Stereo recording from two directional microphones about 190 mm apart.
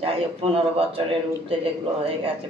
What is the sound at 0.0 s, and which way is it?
A woman's voice, 30° right (ahead or behind).